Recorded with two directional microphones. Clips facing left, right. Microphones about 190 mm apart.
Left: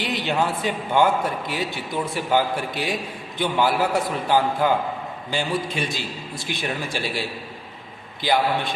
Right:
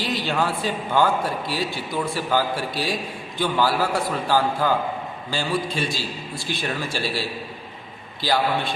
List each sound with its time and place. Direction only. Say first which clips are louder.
0.0 s a man's voice: even; 20° left (ahead or behind)